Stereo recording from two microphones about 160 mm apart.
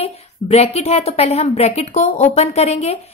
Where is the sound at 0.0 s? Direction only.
40° left (ahead or behind).